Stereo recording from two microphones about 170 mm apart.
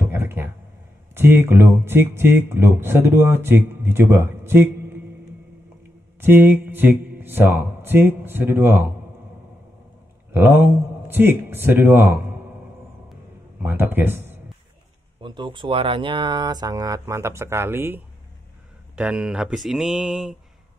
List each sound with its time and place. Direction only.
0.1 s a sound: 15° right (ahead or behind)
1.1 s speech: 15° right (ahead or behind)
6.2 s speech: 10° right (ahead or behind)
10.3 s a man's voice: 10° right (ahead or behind)
13.6 s speech: 10° right (ahead or behind)
15.2 s speech: 30° right (ahead or behind); by 20.3 s 5° right (ahead or behind)